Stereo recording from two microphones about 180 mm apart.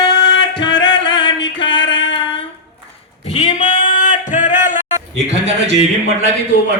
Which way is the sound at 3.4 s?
45° left (ahead or behind).